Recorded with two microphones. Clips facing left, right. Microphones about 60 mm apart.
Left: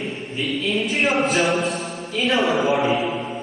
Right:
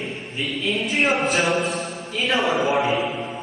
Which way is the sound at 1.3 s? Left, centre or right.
Right.